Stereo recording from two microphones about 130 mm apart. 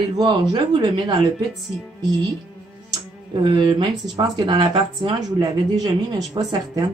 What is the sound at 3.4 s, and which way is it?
Speech, 35° right (ahead or behind).